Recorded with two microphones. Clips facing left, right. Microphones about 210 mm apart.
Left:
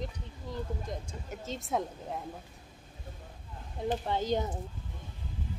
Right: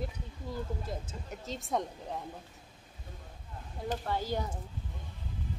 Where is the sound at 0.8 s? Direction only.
Centre (ahead or behind).